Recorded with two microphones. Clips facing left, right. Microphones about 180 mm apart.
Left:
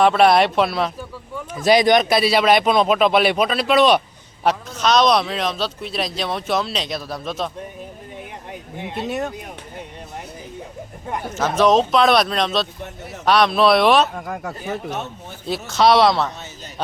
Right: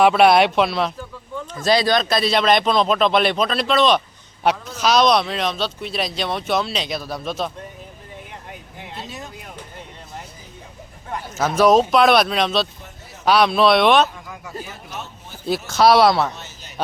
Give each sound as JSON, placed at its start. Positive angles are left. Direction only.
{"t": 0.0, "sound": "speech", "side_deg": 0}
{"t": 1.5, "sound": "speech", "side_deg": 15}
{"t": 4.4, "sound": "speech", "side_deg": 0}
{"t": 9.0, "sound": "speech", "side_deg": 65}
{"t": 11.3, "sound": "speech", "side_deg": -5}
{"t": 14.2, "sound": "speech", "side_deg": 55}
{"t": 15.4, "sound": "speech", "side_deg": 0}